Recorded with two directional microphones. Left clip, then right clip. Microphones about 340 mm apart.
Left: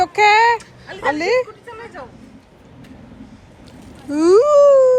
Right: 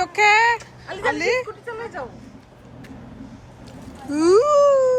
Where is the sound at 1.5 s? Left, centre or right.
Right.